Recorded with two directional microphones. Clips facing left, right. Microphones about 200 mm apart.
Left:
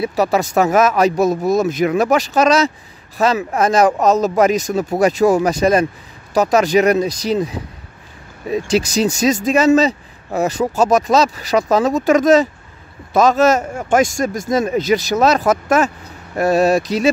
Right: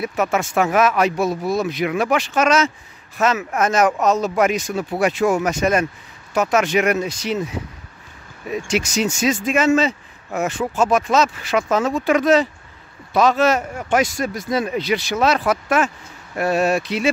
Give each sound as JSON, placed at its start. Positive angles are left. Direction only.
{"t": 0.0, "sound": "a man's voice", "side_deg": 35}